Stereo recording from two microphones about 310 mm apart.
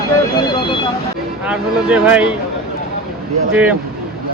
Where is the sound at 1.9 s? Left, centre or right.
Centre.